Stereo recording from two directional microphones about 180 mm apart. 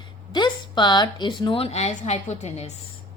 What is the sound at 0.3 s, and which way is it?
A woman's voice, 25° left (ahead or behind).